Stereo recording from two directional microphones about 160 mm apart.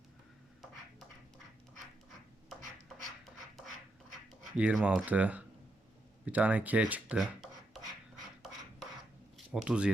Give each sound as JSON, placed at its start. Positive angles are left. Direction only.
{"t": 4.5, "sound": "speech", "side_deg": -5}
{"t": 9.5, "sound": "speech", "side_deg": -5}